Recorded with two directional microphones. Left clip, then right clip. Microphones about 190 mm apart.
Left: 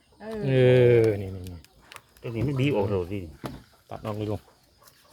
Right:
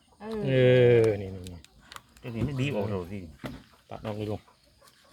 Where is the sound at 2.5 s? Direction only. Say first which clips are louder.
Left 6 dB; 40° left (ahead or behind).